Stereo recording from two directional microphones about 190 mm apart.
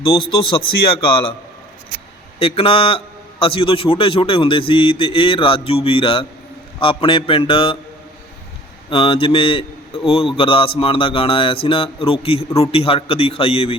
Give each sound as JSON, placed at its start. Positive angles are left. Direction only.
{"t": 0.5, "sound": "a man's voice", "side_deg": 20}
{"t": 2.4, "sound": "a man's voice", "side_deg": 30}
{"t": 8.9, "sound": "a man's voice", "side_deg": 30}